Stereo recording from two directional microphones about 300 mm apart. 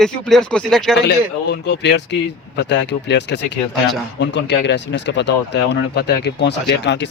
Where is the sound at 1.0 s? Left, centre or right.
Left.